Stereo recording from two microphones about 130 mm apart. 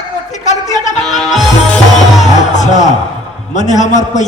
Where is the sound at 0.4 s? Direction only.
65° left (ahead or behind).